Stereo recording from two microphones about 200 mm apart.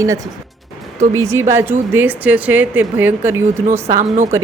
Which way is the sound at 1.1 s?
15° right (ahead or behind).